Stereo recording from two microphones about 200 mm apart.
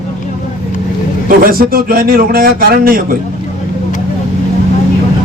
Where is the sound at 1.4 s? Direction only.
45° right (ahead or behind).